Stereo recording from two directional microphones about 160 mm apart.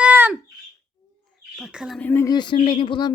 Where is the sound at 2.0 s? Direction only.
10° left (ahead or behind).